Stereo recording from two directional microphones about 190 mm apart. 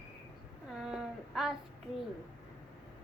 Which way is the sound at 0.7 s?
5° right (ahead or behind).